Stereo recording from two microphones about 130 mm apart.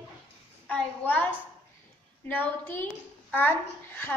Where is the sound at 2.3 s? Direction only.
15° left (ahead or behind).